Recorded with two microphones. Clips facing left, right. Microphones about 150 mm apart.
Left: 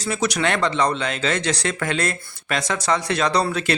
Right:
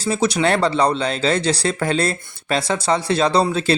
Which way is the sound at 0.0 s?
30° right (ahead or behind).